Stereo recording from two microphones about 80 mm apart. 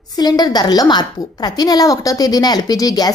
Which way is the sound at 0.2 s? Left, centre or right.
Left.